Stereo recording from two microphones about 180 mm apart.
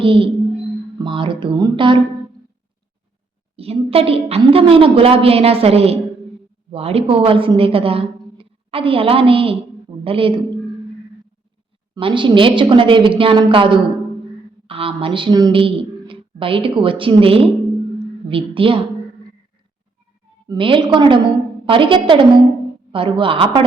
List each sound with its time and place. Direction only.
0.0 s a woman's voice: 30° right (ahead or behind)
3.5 s a woman's voice: 35° right (ahead or behind)
11.9 s a woman's voice: 25° right (ahead or behind)
20.5 s a woman's voice: 30° right (ahead or behind)